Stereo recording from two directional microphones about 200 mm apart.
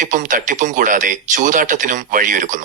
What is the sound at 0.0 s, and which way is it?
Speech, 40° right (ahead or behind).